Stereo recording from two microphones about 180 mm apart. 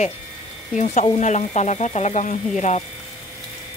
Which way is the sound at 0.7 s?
40° left (ahead or behind).